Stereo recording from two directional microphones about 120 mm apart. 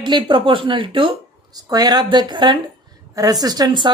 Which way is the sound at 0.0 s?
45° right (ahead or behind).